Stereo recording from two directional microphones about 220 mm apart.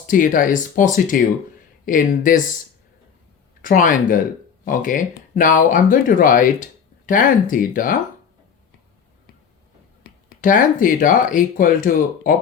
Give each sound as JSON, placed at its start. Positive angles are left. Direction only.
{"t": 0.1, "sound": "speech", "side_deg": 35}
{"t": 3.6, "sound": "speech", "side_deg": 40}
{"t": 10.0, "sound": "speech", "side_deg": 40}